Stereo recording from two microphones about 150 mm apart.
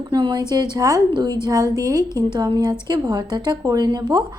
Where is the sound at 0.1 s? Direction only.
30° right (ahead or behind).